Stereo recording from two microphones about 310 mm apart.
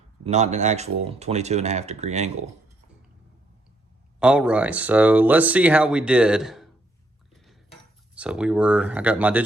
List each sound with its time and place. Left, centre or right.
0.3 s speech: right
4.2 s speech: centre
7.3 s cutlery: centre
8.1 s speech: centre